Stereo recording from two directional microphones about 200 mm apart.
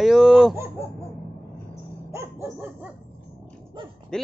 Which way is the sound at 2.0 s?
15° right (ahead or behind).